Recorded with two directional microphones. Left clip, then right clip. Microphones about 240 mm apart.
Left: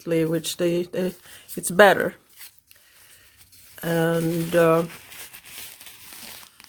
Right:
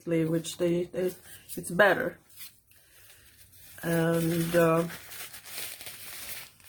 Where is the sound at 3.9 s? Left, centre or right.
Left.